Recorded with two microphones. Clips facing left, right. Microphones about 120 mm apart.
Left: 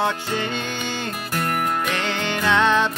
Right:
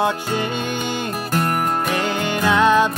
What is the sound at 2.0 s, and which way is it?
Music, 10° right (ahead or behind).